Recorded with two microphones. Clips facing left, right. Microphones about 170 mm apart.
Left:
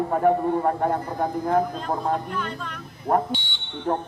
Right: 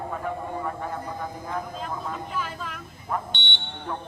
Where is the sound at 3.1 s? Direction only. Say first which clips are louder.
Left 9 dB; 50° left (ahead or behind).